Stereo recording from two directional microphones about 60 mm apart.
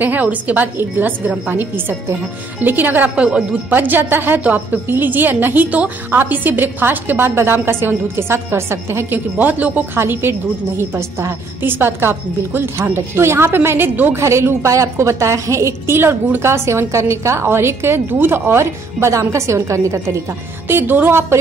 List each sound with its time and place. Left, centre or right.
0.0 s a woman's voice: right
3.2 s speech: centre
3.7 s a woman's voice: right
9.4 s a woman's voice: right
9.9 s a woman's voice: right
11.6 s a woman's voice: right
14.2 s a woman's voice: right
16.0 s a woman's voice: right
20.6 s a woman's voice: right